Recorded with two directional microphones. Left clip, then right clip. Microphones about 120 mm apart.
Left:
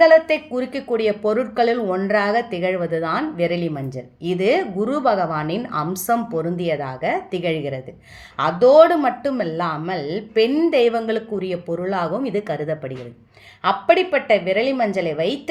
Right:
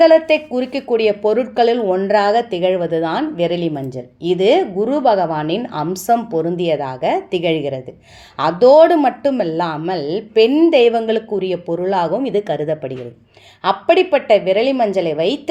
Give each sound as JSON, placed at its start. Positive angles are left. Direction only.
{"t": 0.0, "sound": "speech", "side_deg": -40}
{"t": 13.7, "sound": "speech", "side_deg": -40}